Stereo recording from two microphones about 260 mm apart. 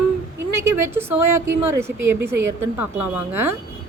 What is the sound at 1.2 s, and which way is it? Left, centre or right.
Speech, right.